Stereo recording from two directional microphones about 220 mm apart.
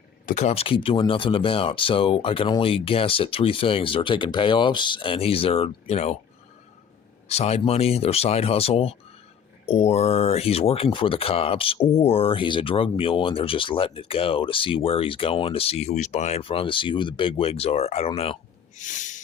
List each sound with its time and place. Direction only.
0.3 s speech: 30° left (ahead or behind)
7.3 s speech: 30° left (ahead or behind)
18.8 s a sound: 35° left (ahead or behind)